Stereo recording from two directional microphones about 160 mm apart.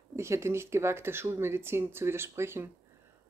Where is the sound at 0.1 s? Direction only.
15° right (ahead or behind).